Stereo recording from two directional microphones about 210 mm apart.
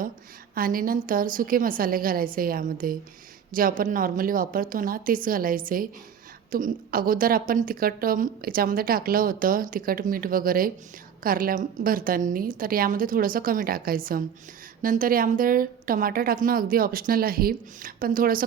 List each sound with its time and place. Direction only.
0.5 s a woman's voice: 40° right (ahead or behind)